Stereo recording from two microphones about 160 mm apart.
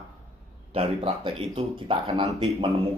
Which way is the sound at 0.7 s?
35° right (ahead or behind).